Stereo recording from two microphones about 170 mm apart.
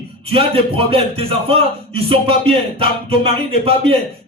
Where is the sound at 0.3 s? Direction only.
35° right (ahead or behind).